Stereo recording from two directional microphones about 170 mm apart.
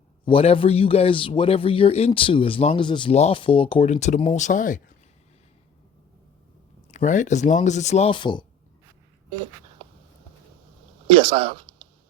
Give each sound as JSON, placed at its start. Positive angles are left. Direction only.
{"t": 0.3, "sound": "a man's voice", "side_deg": 30}
{"t": 6.9, "sound": "speech", "side_deg": 45}
{"t": 11.1, "sound": "speech", "side_deg": -30}